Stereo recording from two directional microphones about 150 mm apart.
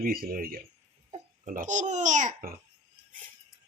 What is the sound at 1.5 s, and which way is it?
Speech, 60° right (ahead or behind).